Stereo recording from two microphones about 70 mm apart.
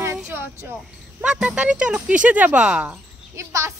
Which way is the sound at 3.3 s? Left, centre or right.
Right.